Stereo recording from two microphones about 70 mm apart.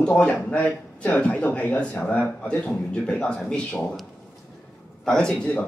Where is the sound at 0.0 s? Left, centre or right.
Centre.